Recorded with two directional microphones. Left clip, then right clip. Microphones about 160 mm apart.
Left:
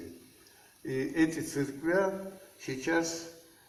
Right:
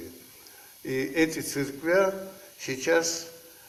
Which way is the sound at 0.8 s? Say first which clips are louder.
Right 4 dB; 35° right (ahead or behind).